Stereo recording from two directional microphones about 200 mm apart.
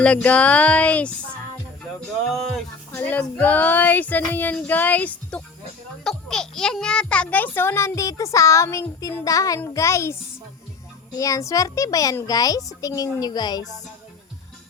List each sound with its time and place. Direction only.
0.0 s a child's voice: 5° left (ahead or behind)
11.2 s a child's voice: 15° left (ahead or behind)